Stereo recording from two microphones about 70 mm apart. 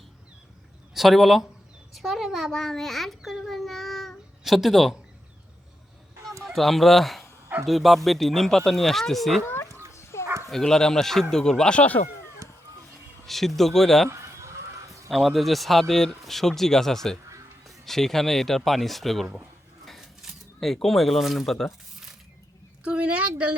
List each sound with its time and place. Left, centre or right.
0.9 s a child's voice: centre
3.2 s a sound: centre
6.4 s speech: centre
9.9 s dog: left
10.5 s speech: centre
13.2 s speech: centre
15.1 s speech: centre
19.8 s a sound: centre
20.8 s speech: centre
22.8 s speech: centre